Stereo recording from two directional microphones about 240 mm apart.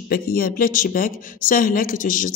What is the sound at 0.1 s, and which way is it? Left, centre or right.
Speech, left.